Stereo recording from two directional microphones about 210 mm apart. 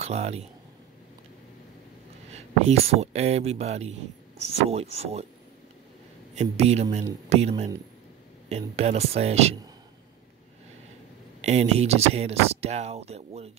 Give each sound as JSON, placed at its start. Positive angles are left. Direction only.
{"t": 0.0, "sound": "speech", "side_deg": -30}
{"t": 2.3, "sound": "speech", "side_deg": -30}
{"t": 6.3, "sound": "speech", "side_deg": -30}
{"t": 11.4, "sound": "speech", "side_deg": -30}